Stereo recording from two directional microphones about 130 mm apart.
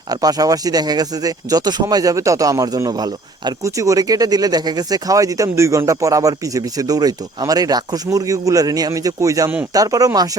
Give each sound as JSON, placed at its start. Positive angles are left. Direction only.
{"t": 0.1, "sound": "speech", "side_deg": -30}